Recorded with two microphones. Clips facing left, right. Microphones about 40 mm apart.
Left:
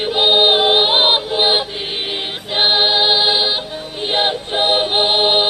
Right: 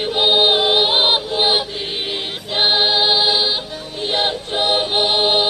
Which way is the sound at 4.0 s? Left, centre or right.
Centre.